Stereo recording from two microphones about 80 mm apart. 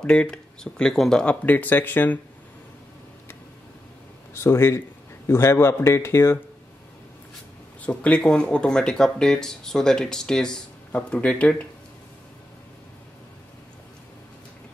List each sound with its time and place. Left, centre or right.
0.0 s speech: centre
1.2 s speech: centre
4.3 s a man's voice: left
7.8 s speech: centre